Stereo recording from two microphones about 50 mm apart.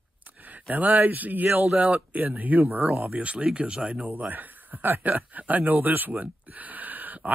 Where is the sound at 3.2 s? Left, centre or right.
Right.